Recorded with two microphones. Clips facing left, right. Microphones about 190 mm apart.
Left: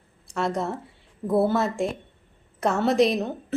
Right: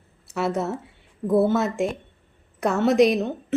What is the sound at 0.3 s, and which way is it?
Speech, 5° right (ahead or behind).